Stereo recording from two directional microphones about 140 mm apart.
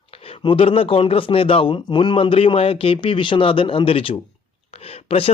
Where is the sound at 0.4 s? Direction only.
40° left (ahead or behind).